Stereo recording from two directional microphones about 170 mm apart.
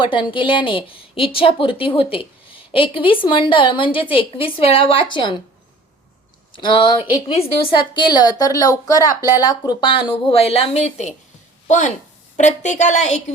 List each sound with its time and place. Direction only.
0.0 s a woman's voice: 30° left (ahead or behind)
6.5 s a woman's voice: 30° left (ahead or behind)
12.4 s a woman's voice: 45° left (ahead or behind)